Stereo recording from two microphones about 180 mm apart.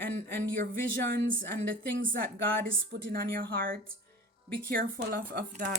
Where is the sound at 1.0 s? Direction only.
70° right (ahead or behind).